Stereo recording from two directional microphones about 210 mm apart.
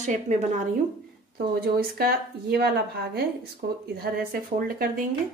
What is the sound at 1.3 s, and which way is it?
Speech, 50° right (ahead or behind).